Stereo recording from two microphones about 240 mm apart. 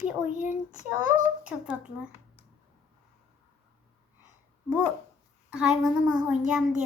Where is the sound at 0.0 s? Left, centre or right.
Centre.